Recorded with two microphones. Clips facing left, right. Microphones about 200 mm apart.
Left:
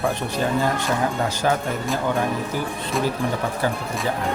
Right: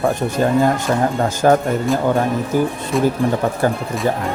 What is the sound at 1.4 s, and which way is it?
Speech, 45° right (ahead or behind).